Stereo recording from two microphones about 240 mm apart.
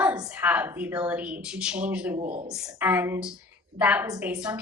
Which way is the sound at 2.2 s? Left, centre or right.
Right.